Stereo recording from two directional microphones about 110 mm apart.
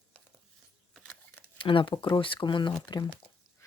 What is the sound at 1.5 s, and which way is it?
Speech, 50° left (ahead or behind).